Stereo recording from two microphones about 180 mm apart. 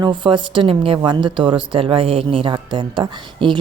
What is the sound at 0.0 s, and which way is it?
Speech, 25° right (ahead or behind).